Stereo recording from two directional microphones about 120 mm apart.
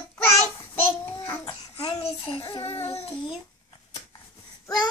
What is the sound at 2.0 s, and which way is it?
Speech, 50° left (ahead or behind).